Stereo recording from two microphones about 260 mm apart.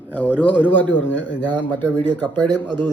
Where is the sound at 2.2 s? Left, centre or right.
Centre.